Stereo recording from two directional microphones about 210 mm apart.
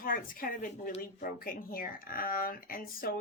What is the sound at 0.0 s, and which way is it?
Speech, 40° left (ahead or behind).